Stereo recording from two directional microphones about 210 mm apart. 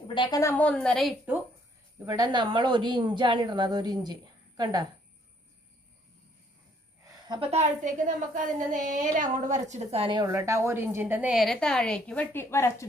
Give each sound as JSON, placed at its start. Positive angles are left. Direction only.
{"t": 0.1, "sound": "a woman's voice", "side_deg": 20}
{"t": 2.0, "sound": "a woman's voice", "side_deg": -20}
{"t": 7.1, "sound": "a woman's voice", "side_deg": -20}